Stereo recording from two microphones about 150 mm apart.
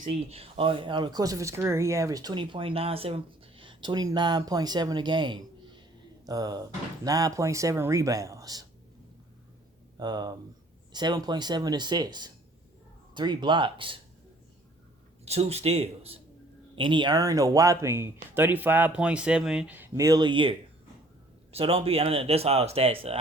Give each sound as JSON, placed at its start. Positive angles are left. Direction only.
{"t": 0.1, "sound": "speech", "side_deg": -40}
{"t": 10.0, "sound": "speech", "side_deg": -30}
{"t": 15.2, "sound": "a man's voice", "side_deg": -45}